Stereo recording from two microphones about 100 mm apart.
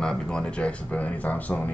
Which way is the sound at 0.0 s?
5° left (ahead or behind).